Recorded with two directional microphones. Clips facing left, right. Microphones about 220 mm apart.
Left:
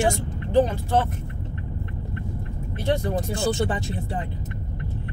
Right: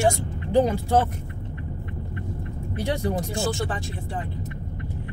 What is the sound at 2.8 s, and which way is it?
Speech, 15° right (ahead or behind).